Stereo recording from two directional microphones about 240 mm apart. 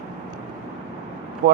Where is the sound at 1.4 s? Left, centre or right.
Right.